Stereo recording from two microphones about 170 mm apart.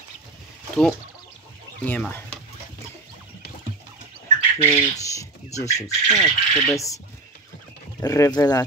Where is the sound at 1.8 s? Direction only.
10° left (ahead or behind).